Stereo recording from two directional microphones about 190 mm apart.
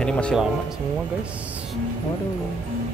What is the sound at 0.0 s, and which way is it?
Speech, 5° left (ahead or behind).